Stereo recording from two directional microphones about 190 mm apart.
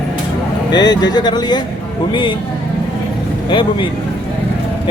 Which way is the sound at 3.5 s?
25° left (ahead or behind).